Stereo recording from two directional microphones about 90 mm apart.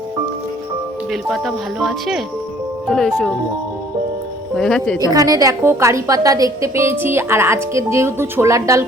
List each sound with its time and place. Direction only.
1.1 s speech: centre (ahead or behind)
4.5 s speech: 10° left (ahead or behind)
4.9 s a woman's voice: 40° right (ahead or behind)